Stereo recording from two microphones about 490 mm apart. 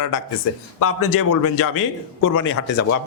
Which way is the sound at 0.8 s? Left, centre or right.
Left.